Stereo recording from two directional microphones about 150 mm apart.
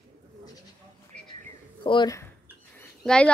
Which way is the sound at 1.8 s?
35° left (ahead or behind).